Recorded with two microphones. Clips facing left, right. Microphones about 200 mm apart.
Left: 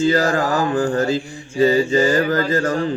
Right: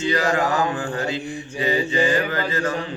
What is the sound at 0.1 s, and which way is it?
Mantra, 40° left (ahead or behind).